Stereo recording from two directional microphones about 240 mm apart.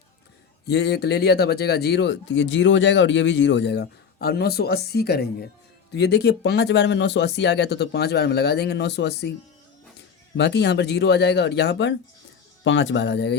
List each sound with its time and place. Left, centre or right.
0.7 s speech: left
10.3 s speech: left